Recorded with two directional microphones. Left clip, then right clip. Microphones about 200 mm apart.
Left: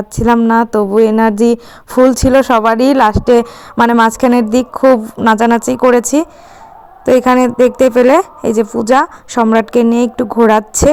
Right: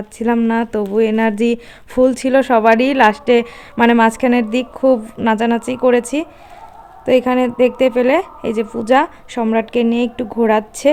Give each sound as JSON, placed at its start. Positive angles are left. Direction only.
{"t": 0.3, "sound": "a man's voice", "side_deg": 25}